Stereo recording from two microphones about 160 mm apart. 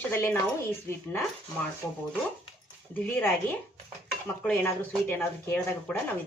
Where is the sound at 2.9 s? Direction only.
15° left (ahead or behind).